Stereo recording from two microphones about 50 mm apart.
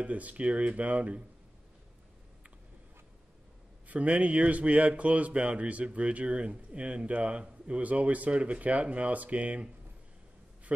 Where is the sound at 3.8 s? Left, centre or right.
Right.